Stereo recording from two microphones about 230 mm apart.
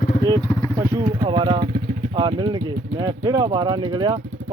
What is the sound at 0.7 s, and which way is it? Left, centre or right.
Speech, centre.